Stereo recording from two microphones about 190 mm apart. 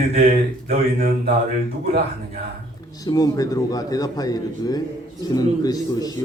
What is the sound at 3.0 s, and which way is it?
Speech, 20° left (ahead or behind).